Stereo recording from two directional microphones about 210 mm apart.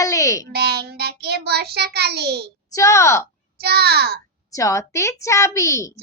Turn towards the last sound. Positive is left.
turn(degrees=15)  # may be behind; listen again after turning